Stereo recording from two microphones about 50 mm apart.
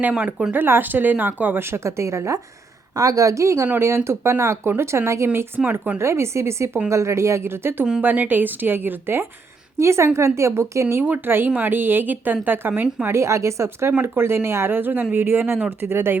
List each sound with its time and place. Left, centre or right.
0.2 s speech: right
0.5 s a woman's voice: right
1.7 s a woman's voice: right
3.8 s speech: right
8.0 s a woman's voice: right
9.7 s speech: right
11.0 s a woman's voice: right
13.1 s speech: right
14.0 s speech: right
14.8 s speech: right